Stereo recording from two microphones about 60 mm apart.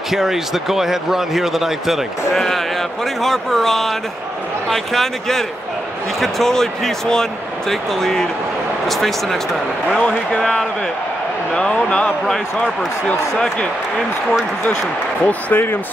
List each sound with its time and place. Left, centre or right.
0.1 s speech: centre
9.9 s speech: centre
11.5 s speech: centre
15.2 s speech: left